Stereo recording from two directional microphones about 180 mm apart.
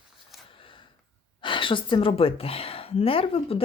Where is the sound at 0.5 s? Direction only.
30° left (ahead or behind).